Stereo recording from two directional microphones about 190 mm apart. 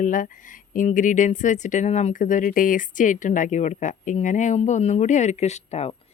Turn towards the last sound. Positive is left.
turn(degrees=35)  # may be behind; listen again after turning